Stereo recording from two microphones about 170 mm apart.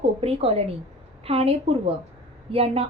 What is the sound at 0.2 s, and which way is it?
A woman's voice, 35° right (ahead or behind).